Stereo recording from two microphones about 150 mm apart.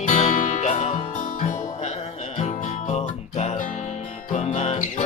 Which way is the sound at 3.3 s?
50° left (ahead or behind).